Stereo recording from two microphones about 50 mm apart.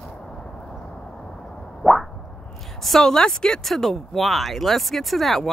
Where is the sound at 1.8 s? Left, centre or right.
Centre.